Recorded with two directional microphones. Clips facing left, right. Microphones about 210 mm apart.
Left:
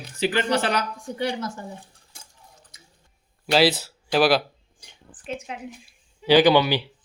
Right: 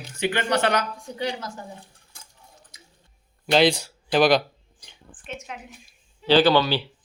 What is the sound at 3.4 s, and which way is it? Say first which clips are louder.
Speech: right 1 dB; 5° left (ahead or behind).